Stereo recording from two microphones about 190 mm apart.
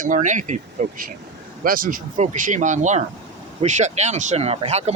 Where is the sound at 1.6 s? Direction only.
50° right (ahead or behind).